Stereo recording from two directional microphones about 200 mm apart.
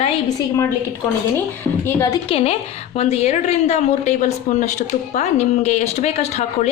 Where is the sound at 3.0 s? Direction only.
30° left (ahead or behind).